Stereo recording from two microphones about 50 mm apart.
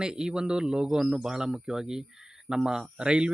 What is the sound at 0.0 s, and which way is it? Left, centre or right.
Speech, centre.